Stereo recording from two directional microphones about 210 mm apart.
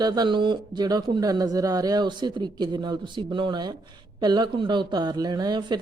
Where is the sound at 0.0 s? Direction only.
20° right (ahead or behind).